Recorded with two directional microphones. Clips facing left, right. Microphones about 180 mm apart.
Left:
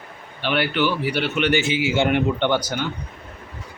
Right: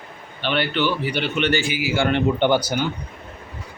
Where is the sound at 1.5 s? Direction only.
20° left (ahead or behind).